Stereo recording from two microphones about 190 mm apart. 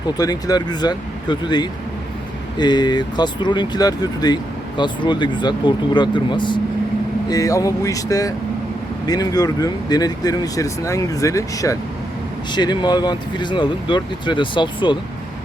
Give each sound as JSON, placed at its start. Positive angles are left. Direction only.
{"t": 0.2, "sound": "speech", "side_deg": 20}